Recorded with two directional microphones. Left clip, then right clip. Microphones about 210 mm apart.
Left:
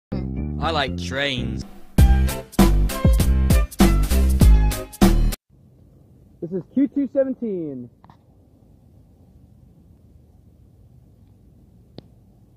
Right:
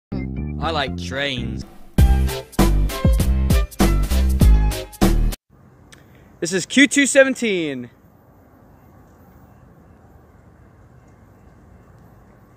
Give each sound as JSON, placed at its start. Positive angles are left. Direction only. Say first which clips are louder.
{"t": 0.1, "sound": "music", "louder": "even", "side_deg": 0}
{"t": 6.7, "sound": "speech", "louder": "right 8 dB", "side_deg": -30}